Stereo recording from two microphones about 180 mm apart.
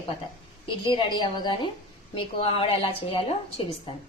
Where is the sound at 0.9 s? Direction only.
25° left (ahead or behind).